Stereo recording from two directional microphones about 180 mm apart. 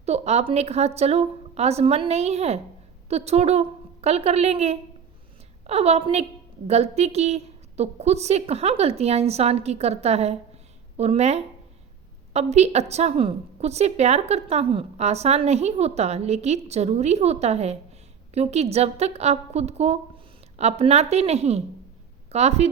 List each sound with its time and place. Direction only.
0.0 s a woman's voice: 35° right (ahead or behind)